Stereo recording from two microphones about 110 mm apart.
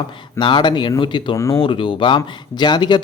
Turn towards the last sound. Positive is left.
turn(degrees=45)  # may be behind; listen again after turning